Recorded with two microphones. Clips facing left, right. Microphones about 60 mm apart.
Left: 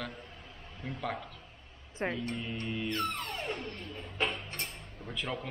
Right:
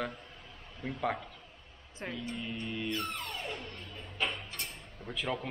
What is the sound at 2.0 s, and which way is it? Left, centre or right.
Speech, left.